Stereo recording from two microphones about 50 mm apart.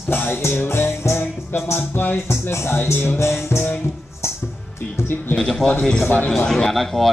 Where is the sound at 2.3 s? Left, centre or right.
Left.